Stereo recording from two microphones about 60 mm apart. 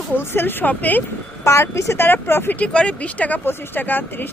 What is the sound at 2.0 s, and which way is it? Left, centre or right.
Speech, left.